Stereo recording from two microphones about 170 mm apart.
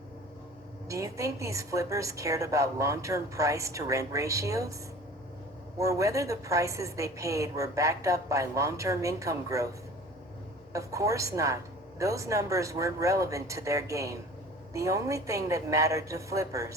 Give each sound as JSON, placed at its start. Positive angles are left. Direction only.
{"t": 0.9, "sound": "a woman's voice", "side_deg": -20}
{"t": 5.7, "sound": "a woman's voice", "side_deg": -20}
{"t": 10.7, "sound": "a woman's voice", "side_deg": -20}